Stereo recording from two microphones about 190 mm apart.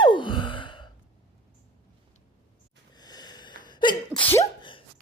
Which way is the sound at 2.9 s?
20° left (ahead or behind).